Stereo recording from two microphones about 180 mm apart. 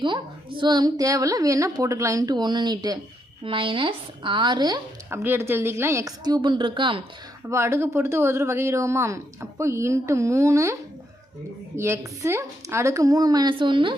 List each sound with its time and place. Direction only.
0.0 s a woman's voice: 25° right (ahead or behind)
5.2 s speech: 10° right (ahead or behind)
7.5 s speech: 15° right (ahead or behind)
11.8 s a woman's voice: 15° right (ahead or behind)